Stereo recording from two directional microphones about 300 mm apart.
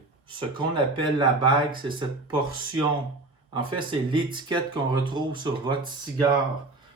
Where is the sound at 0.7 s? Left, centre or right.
Centre.